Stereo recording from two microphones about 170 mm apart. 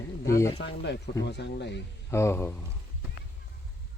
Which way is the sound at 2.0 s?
15° left (ahead or behind).